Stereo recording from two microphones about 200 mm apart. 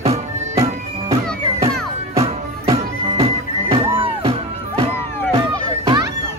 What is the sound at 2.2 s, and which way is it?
Music, 30° right (ahead or behind).